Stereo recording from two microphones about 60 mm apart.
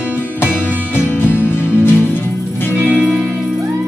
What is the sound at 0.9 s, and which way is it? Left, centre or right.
Music, left.